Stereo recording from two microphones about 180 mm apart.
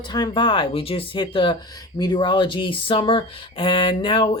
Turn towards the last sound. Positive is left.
turn(degrees=30)  # may be behind; listen again after turning